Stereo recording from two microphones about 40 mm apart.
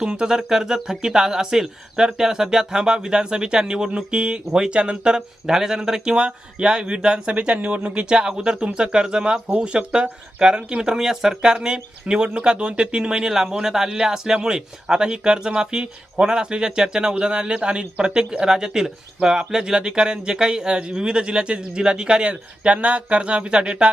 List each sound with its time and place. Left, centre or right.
0.0 s a man's voice: right
5.5 s a man's voice: centre; by 8.2 s right
8.2 s a man's voice: centre